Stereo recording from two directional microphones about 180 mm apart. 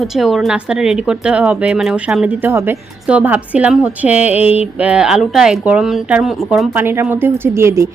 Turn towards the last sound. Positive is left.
turn(degrees=-15)  # may be behind; listen again after turning